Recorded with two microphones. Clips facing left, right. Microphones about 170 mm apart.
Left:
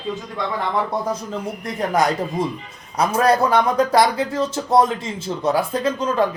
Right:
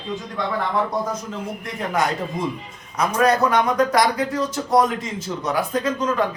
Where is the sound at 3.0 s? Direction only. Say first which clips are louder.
Left 1 dB; 30° left (ahead or behind).